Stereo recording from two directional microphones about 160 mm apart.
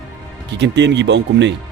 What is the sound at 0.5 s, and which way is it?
Speech, 90° right.